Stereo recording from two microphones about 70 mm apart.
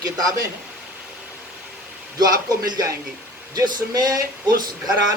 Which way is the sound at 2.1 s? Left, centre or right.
Right.